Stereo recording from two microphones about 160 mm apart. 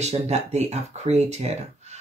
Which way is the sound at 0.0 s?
45° right (ahead or behind).